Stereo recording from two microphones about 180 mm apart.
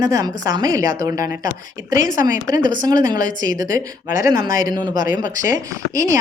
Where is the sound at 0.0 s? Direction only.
20° right (ahead or behind).